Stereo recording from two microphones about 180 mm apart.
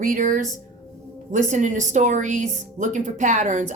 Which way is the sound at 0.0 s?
50° right (ahead or behind).